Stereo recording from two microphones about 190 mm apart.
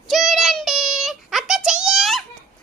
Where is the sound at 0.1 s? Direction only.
Centre (ahead or behind).